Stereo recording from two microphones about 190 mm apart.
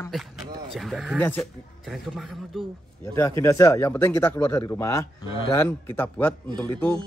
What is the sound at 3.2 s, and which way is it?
Speech, 15° left (ahead or behind).